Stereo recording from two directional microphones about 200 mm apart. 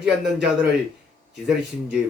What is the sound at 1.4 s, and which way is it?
Speech, centre (ahead or behind).